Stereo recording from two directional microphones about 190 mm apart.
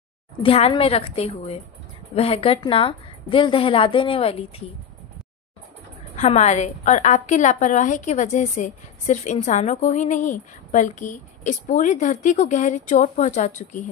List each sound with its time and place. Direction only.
0.4 s a woman's voice: 30° left (ahead or behind)
6.1 s a woman's voice: 40° left (ahead or behind)